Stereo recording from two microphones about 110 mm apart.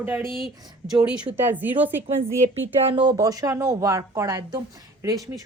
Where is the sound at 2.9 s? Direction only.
45° right (ahead or behind).